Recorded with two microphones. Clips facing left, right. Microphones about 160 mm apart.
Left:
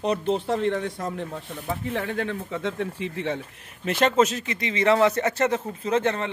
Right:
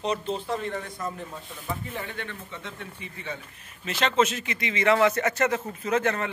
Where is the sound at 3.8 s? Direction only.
50° left (ahead or behind); by 6.3 s 25° left (ahead or behind).